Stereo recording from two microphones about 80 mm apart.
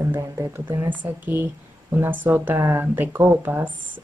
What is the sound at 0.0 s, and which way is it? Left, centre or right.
Speech, right.